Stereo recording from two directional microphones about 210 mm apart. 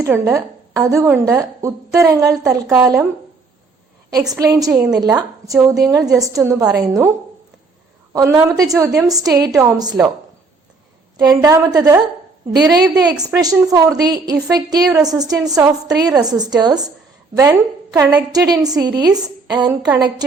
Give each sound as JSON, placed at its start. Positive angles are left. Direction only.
{"t": 0.0, "sound": "a woman's voice", "side_deg": -10}
{"t": 4.4, "sound": "a woman's voice", "side_deg": -15}
{"t": 8.1, "sound": "a woman's voice", "side_deg": -15}
{"t": 11.2, "sound": "a woman's voice", "side_deg": -15}